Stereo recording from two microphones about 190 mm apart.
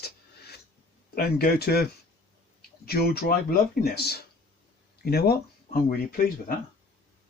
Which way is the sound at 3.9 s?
55° left (ahead or behind).